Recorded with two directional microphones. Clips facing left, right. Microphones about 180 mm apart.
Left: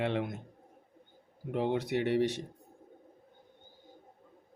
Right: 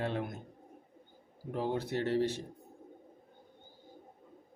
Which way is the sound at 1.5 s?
75° left (ahead or behind).